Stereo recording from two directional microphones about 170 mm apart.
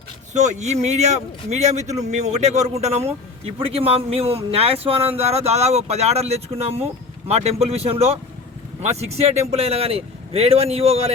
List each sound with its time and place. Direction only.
0.3 s a man's voice: 40° right (ahead or behind)